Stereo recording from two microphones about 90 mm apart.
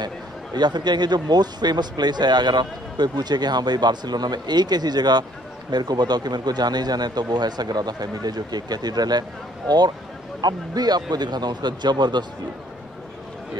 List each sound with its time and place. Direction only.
0.6 s speech: 55° right (ahead or behind)